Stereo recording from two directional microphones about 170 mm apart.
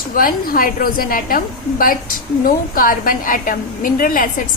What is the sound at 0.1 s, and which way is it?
A woman's voice, 55° left (ahead or behind).